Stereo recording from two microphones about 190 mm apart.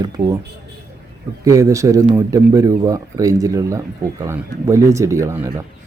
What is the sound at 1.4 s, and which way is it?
A man's voice, 15° right (ahead or behind).